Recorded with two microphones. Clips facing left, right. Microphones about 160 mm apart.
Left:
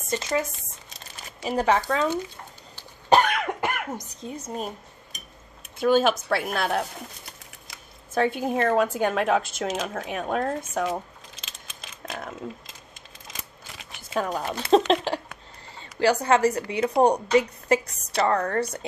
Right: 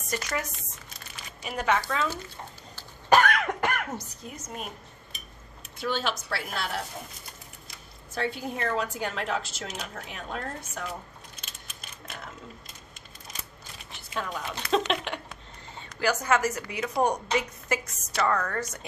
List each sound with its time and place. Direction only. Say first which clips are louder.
0.1 s speech: left 6 dB; 25° left (ahead or behind)
2.7 s cough: left 2 dB; 20° left (ahead or behind)
4.3 s speech: left 7 dB; 30° left (ahead or behind)
5.8 s a woman's voice: left 10 dB; 50° left (ahead or behind)
8.1 s a woman's voice: left 8 dB; 50° left (ahead or behind)
9.7 s speech: left 9 dB; 90° left
10.0 s a woman's voice: left 11 dB; 55° left (ahead or behind)
11.4 s a sound: left 2 dB; 90° left
14.1 s a woman's voice: left 7 dB; 40° left (ahead or behind)